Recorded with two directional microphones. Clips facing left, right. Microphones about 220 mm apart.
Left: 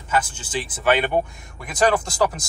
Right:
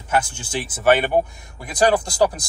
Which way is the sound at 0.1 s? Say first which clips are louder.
Right 1 dB; 10° right (ahead or behind).